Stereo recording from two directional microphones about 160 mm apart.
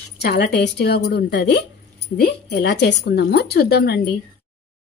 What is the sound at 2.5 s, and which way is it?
Speech, 90° left.